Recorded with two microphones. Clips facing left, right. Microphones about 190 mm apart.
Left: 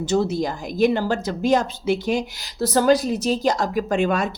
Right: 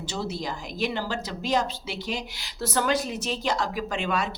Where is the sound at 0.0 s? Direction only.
45° left (ahead or behind).